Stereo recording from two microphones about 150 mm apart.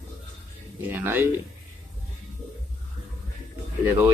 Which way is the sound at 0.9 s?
15° right (ahead or behind).